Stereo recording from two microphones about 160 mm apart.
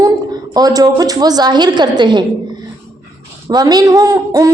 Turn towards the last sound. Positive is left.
turn(degrees=-20)  # may be behind; listen again after turning